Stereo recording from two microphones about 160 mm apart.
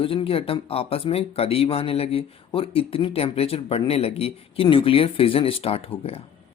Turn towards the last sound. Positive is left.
turn(degrees=35)  # may be behind; listen again after turning